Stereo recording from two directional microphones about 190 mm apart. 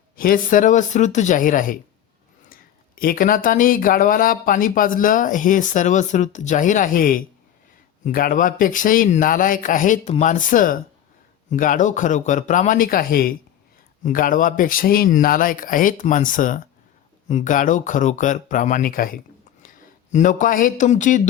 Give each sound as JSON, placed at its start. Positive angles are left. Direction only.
{"t": 0.2, "sound": "a man's voice", "side_deg": 45}